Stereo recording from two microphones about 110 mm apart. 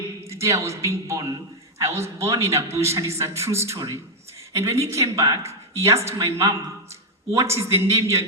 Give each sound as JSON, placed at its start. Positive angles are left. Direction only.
{"t": 0.3, "sound": "a man's voice", "side_deg": -25}